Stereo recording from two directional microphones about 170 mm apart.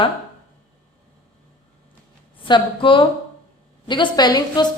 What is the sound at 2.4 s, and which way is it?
A woman's voice, 30° left (ahead or behind).